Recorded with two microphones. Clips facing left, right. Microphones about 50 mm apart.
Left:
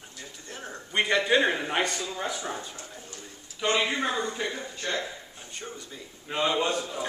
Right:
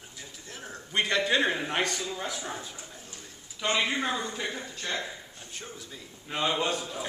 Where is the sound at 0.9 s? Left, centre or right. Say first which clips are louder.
Left 3 dB; centre.